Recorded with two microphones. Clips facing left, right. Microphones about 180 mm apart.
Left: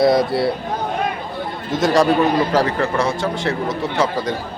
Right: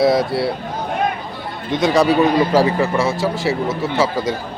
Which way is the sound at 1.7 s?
Centre (ahead or behind).